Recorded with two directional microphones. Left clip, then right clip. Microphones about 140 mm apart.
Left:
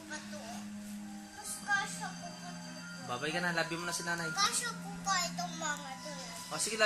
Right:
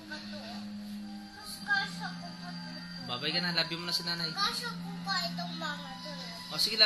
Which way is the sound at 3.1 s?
20° left (ahead or behind).